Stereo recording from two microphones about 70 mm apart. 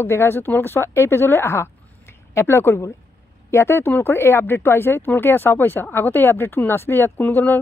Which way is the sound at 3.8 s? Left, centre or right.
Left.